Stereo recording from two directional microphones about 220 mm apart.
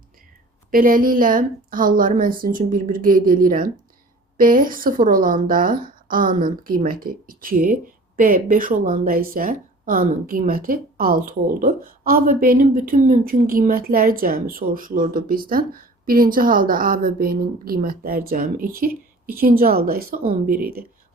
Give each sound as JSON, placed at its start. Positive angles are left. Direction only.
{"t": 0.7, "sound": "a woman's voice", "side_deg": -40}